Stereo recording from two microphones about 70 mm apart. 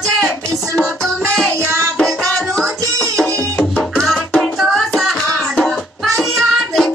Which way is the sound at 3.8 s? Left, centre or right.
Centre.